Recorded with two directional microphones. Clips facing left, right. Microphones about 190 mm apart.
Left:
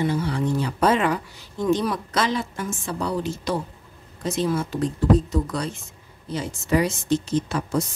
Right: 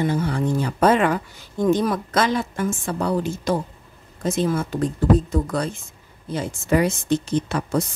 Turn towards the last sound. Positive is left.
turn(degrees=-60)  # may be behind; listen again after turning